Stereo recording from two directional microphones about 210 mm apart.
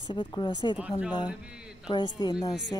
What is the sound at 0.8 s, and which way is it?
Speech, 5° right (ahead or behind).